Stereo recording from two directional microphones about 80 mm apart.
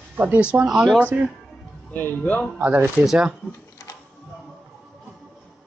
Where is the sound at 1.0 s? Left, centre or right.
Centre.